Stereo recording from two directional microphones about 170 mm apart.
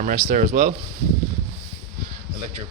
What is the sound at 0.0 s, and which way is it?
Speech, 50° right (ahead or behind).